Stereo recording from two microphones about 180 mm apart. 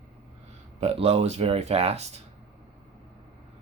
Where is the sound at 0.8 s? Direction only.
35° right (ahead or behind).